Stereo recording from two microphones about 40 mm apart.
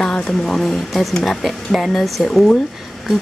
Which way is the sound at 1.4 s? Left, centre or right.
Centre.